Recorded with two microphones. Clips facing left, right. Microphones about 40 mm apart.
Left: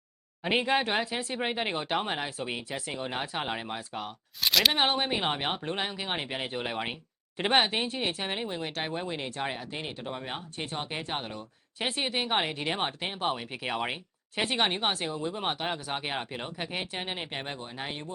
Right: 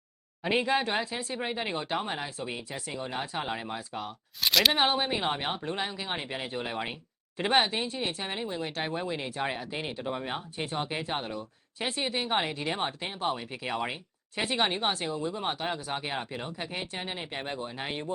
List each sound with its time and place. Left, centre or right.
0.4 s speech: centre
1.0 s speech: left
3.8 s speech: centre
4.4 s speech: centre; by 8.7 s left
8.9 s speech: centre
9.3 s speech: centre
12.0 s speech: left
14.4 s speech: centre
17.4 s speech: centre